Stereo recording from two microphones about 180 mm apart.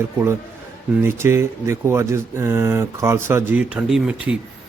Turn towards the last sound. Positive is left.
turn(degrees=-5)  # may be behind; listen again after turning